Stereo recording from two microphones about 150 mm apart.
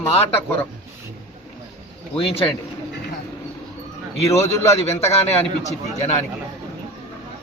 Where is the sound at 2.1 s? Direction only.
35° left (ahead or behind).